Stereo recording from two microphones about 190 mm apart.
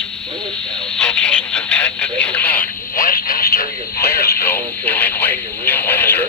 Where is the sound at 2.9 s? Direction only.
45° left (ahead or behind).